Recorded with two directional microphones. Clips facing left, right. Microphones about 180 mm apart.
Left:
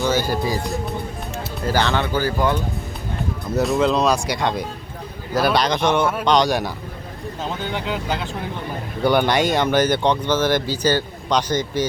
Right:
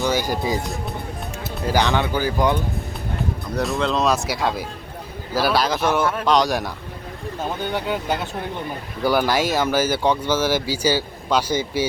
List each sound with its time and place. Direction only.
0.0 s speech: 15° right (ahead or behind)
1.6 s speech: 15° right (ahead or behind)
3.5 s speech: centre (ahead or behind)
9.0 s speech: centre (ahead or behind)